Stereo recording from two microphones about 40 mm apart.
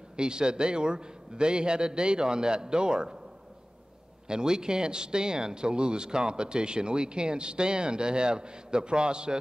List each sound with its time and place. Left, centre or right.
0.1 s speech: right
4.3 s speech: centre